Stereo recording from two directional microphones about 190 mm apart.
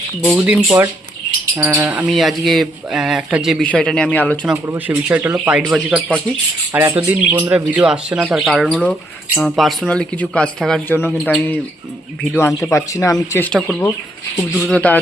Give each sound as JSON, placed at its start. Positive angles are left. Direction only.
{"t": 0.3, "sound": "speech", "side_deg": -5}
{"t": 4.4, "sound": "speech", "side_deg": -10}